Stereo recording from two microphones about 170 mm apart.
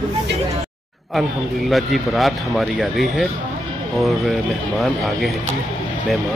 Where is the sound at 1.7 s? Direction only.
Centre (ahead or behind).